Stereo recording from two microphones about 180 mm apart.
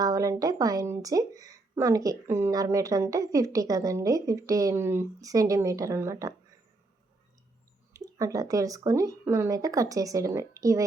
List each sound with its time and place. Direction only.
0.0 s speech: 20° right (ahead or behind)
7.9 s speech: 20° right (ahead or behind)